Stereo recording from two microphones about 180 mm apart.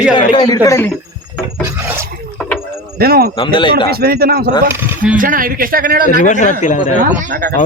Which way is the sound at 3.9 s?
60° right (ahead or behind).